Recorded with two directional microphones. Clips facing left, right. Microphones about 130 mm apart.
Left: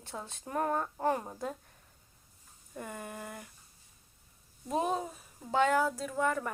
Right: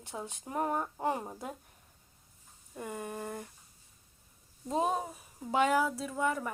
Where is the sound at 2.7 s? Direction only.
20° right (ahead or behind).